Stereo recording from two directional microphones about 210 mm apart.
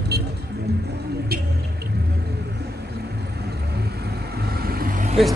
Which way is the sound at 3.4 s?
50° right (ahead or behind).